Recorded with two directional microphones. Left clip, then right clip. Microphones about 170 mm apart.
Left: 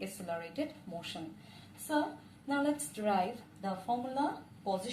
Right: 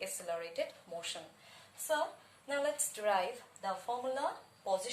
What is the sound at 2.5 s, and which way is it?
Speech, 20° right (ahead or behind).